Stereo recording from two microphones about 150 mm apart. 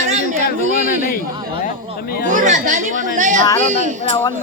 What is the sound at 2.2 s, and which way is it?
Speech, 55° right (ahead or behind).